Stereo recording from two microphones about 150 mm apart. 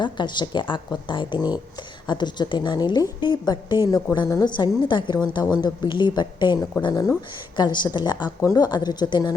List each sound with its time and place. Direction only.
0.0 s a woman's voice: 30° left (ahead or behind)